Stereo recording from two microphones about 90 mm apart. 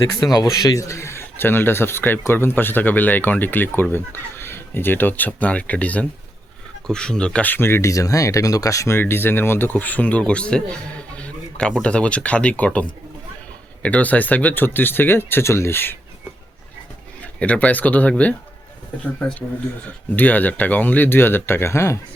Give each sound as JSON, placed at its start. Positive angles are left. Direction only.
{"t": 0.0, "sound": "speech", "side_deg": 40}
{"t": 13.8, "sound": "speech", "side_deg": 15}
{"t": 17.4, "sound": "speech", "side_deg": 15}
{"t": 20.1, "sound": "speech", "side_deg": 20}